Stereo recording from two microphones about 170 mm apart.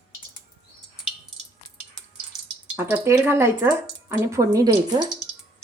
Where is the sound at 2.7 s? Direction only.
15° right (ahead or behind).